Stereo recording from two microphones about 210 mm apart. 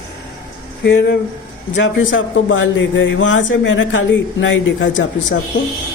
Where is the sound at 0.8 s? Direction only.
60° left (ahead or behind).